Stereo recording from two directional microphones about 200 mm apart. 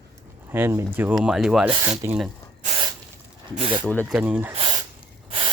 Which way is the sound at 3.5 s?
25° right (ahead or behind).